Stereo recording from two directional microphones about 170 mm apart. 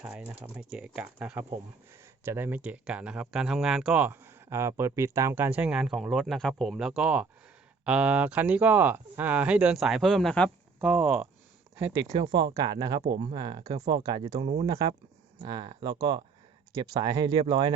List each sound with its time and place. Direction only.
0.5 s speech: 5° right (ahead or behind)
10.8 s speech: 10° right (ahead or behind)
12.1 s speech: 25° right (ahead or behind)
14.7 s speech: 20° right (ahead or behind)